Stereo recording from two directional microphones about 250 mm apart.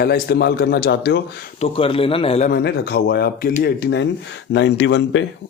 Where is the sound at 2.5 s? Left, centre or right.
Left.